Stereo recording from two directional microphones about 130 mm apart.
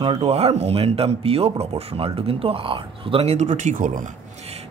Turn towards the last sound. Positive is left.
turn(degrees=-85)